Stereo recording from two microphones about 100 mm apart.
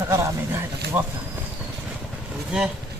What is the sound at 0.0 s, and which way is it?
Speech, 30° right (ahead or behind).